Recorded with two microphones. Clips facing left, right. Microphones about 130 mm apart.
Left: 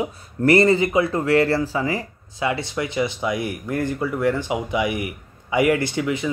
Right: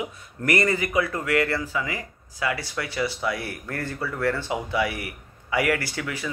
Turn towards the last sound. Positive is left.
turn(degrees=20)  # may be behind; listen again after turning